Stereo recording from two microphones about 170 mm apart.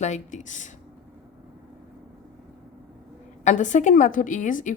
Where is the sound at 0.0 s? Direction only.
45° left (ahead or behind).